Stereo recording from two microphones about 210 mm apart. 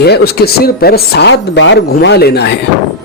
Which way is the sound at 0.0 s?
50° left (ahead or behind).